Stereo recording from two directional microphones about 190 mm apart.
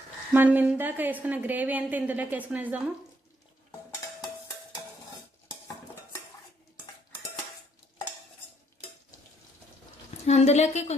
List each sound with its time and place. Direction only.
0.3 s a woman's voice: 10° right (ahead or behind)
10.2 s a woman's voice: 35° left (ahead or behind)